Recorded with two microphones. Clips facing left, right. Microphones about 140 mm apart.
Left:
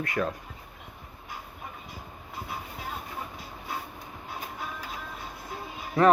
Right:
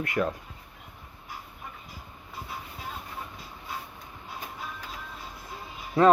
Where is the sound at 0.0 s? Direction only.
25° right (ahead or behind).